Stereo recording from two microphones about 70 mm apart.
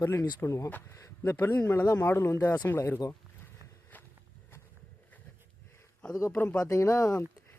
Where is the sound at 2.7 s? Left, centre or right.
Left.